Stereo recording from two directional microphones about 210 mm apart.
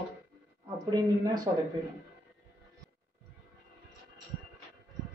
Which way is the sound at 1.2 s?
20° right (ahead or behind).